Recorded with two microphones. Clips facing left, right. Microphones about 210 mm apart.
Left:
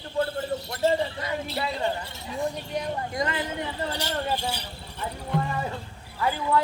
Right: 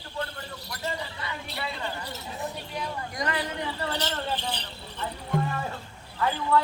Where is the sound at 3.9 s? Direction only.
10° left (ahead or behind).